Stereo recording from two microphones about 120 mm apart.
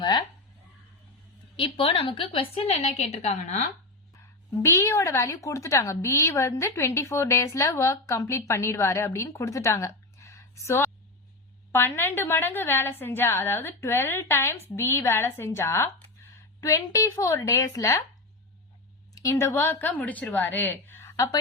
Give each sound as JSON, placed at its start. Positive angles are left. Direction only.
{"t": 1.5, "sound": "a woman's voice", "side_deg": 50}
{"t": 4.6, "sound": "speech", "side_deg": 25}
{"t": 19.1, "sound": "a woman's voice", "side_deg": 30}